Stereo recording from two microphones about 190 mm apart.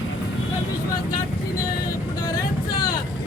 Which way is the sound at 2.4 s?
20° left (ahead or behind).